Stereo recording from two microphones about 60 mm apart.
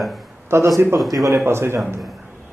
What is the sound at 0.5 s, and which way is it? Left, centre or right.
Speech, right.